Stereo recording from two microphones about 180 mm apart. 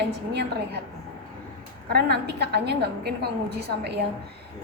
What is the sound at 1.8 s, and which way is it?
A woman's voice, 65° right (ahead or behind).